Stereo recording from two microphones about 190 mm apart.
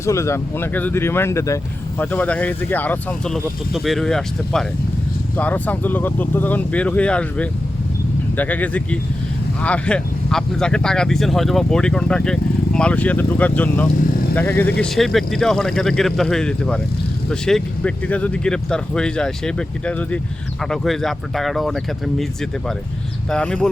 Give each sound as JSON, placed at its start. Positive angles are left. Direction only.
{"t": 0.0, "sound": "speech", "side_deg": 15}
{"t": 23.3, "sound": "speech", "side_deg": 5}